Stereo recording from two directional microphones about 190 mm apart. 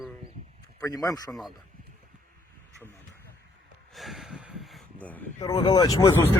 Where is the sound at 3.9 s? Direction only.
Centre (ahead or behind).